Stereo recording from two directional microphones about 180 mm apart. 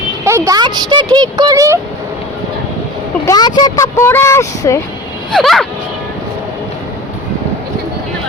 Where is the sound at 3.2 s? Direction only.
20° left (ahead or behind).